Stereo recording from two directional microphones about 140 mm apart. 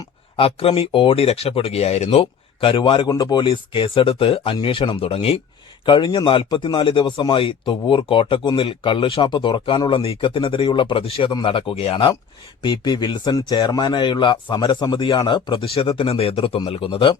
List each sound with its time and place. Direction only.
0.3 s speech: 40° left (ahead or behind)
12.6 s speech: 30° left (ahead or behind)